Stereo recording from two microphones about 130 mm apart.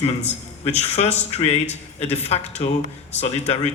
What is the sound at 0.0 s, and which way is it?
A man's voice, 55° left (ahead or behind).